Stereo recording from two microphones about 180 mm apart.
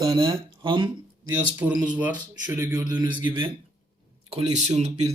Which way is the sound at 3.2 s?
30° right (ahead or behind).